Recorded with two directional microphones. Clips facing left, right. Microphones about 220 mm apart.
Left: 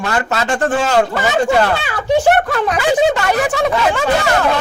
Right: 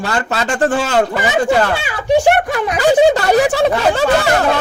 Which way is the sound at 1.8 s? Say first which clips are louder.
Right 1 dB; 15° right (ahead or behind).